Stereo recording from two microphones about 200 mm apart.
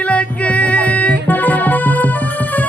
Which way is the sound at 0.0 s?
5° left (ahead or behind).